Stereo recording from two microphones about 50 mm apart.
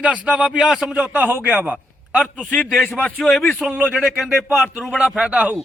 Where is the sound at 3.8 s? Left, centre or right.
Centre.